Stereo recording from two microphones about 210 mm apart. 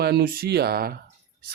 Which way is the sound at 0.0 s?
50° right (ahead or behind).